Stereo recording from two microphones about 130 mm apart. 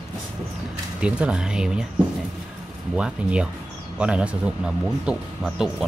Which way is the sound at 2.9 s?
10° right (ahead or behind).